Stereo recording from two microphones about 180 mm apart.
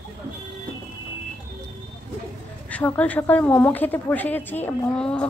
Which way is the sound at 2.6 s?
10° left (ahead or behind).